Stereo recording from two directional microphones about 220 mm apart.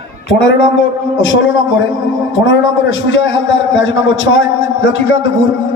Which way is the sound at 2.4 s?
60° left (ahead or behind).